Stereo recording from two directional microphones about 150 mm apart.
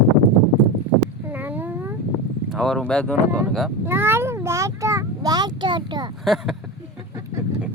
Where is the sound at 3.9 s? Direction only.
15° right (ahead or behind).